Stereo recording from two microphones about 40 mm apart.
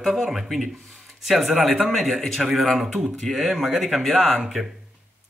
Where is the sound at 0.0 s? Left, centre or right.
Centre.